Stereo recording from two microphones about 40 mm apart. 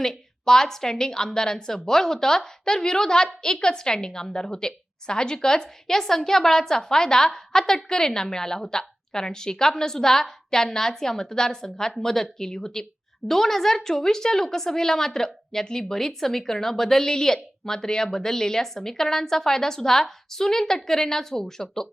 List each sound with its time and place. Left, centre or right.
0.0 s a woman's voice: centre